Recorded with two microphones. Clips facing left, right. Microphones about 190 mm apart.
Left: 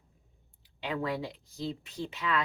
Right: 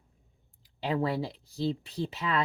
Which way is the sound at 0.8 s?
35° right (ahead or behind).